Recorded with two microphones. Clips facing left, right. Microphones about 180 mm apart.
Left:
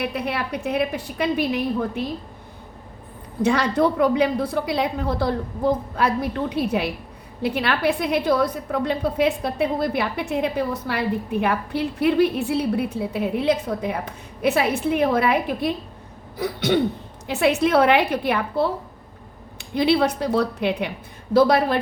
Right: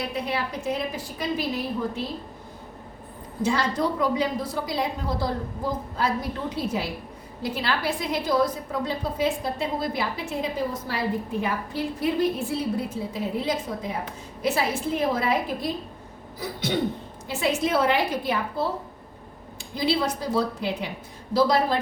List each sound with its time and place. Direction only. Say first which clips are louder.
0.0 s a woman's voice: left 3 dB; 65° left (ahead or behind)
3.4 s a woman's voice: left 5 dB; 65° left (ahead or behind)